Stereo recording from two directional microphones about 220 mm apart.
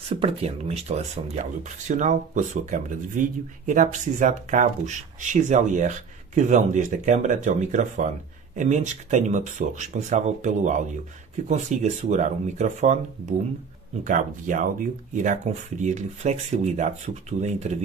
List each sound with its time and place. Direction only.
0.1 s speech: 25° right (ahead or behind)
14.0 s speech: 35° right (ahead or behind)